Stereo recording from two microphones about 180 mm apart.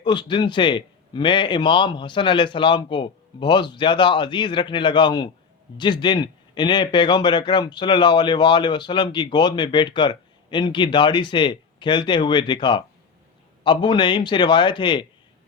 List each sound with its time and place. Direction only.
0.0 s speech: 25° left (ahead or behind)